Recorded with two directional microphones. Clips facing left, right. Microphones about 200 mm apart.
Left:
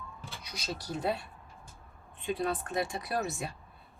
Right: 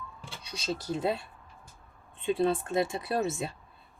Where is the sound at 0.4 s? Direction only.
25° right (ahead or behind).